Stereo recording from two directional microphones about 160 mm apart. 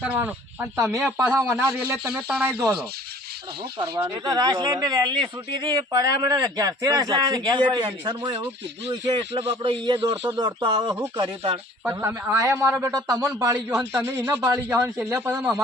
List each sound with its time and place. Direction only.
0.0 s a man's voice: 10° right (ahead or behind)
3.8 s speech: 25° right (ahead or behind)
11.9 s a man's voice: 15° right (ahead or behind)
13.2 s a man's voice: 10° right (ahead or behind)